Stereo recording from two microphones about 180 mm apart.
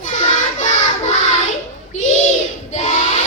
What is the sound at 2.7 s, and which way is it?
Child singing, 40° left (ahead or behind).